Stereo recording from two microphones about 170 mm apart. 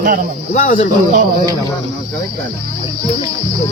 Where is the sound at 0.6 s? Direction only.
50° left (ahead or behind).